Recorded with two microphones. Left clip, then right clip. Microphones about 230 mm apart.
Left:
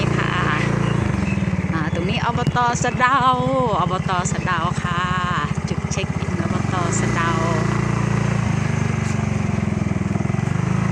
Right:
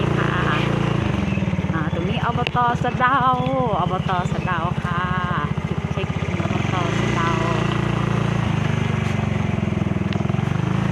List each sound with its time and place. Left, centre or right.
2.2 s speech: centre